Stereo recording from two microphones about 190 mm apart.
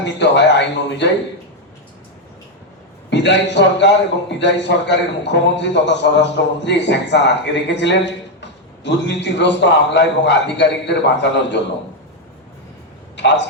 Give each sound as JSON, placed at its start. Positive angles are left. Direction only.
{"t": 0.0, "sound": "a man's voice", "side_deg": 65}
{"t": 3.1, "sound": "a man's voice", "side_deg": 65}
{"t": 13.1, "sound": "a man's voice", "side_deg": 65}